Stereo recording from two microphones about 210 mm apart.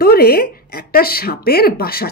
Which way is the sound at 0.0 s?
45° left (ahead or behind).